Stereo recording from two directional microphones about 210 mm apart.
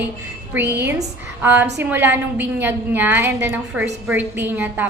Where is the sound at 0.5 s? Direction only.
10° right (ahead or behind).